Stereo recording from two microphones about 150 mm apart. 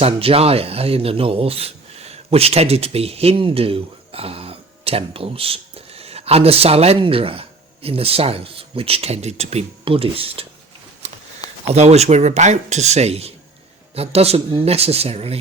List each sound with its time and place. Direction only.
0.0 s speech: 40° right (ahead or behind)
11.0 s a sound: 45° right (ahead or behind)
11.7 s speech: 45° right (ahead or behind)